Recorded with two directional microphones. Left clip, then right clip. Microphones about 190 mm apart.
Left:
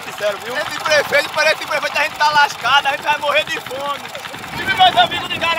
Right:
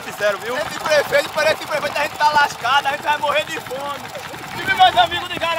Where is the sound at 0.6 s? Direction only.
35° left (ahead or behind).